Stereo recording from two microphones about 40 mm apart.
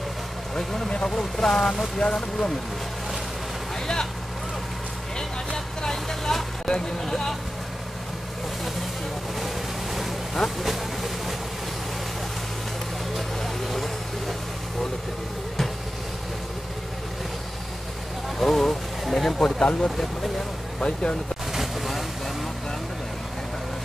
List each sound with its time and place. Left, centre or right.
0.6 s speech: centre
3.8 s vehicle: centre
5.8 s vehicle: centre
10.6 s vehicle: centre
13.4 s vehicle: centre
18.4 s speech: centre
19.3 s speech: left
21.5 s vehicle: centre